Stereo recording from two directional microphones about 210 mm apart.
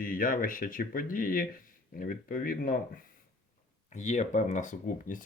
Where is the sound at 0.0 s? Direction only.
40° left (ahead or behind).